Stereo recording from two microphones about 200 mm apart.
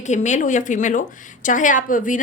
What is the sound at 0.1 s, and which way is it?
A woman's voice, 35° left (ahead or behind).